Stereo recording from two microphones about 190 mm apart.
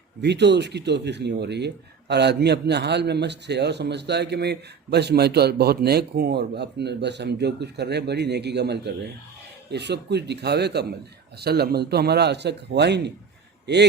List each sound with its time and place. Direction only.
0.2 s speech: 60° right (ahead or behind)